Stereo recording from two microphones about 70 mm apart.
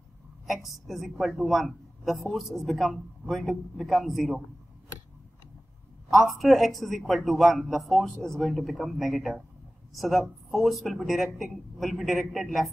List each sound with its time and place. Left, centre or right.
0.5 s a man's voice: centre
6.0 s a man's voice: centre